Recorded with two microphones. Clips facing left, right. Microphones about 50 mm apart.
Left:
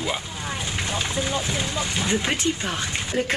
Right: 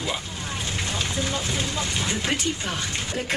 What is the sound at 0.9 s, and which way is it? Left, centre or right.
Speech, centre.